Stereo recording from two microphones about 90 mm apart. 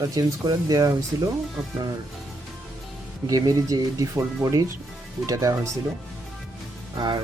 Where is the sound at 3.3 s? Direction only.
40° right (ahead or behind).